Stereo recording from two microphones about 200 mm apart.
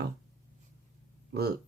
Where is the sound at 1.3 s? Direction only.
50° right (ahead or behind).